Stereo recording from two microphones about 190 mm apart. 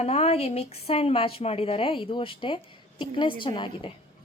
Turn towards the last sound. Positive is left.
turn(degrees=25)  # may be behind; listen again after turning